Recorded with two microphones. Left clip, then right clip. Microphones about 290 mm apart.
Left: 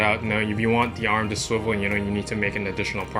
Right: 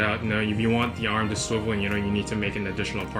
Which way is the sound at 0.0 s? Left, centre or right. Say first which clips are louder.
Left 3 dB; centre.